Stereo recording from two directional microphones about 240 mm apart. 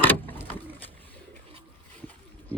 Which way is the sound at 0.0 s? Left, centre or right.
Centre.